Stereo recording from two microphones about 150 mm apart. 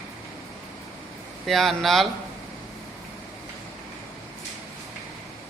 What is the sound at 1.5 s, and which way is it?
Speech, centre (ahead or behind).